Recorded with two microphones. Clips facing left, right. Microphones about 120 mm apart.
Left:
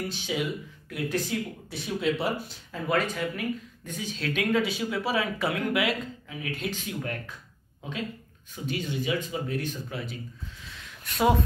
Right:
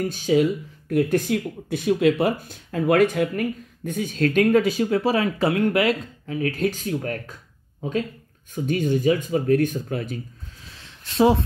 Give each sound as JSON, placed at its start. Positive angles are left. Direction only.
{"t": 0.1, "sound": "speech", "side_deg": -45}
{"t": 1.7, "sound": "speech", "side_deg": -65}
{"t": 8.6, "sound": "speech", "side_deg": -50}
{"t": 10.7, "sound": "a sound", "side_deg": -30}